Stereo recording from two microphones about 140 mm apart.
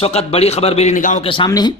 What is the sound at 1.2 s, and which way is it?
Speech, 35° left (ahead or behind).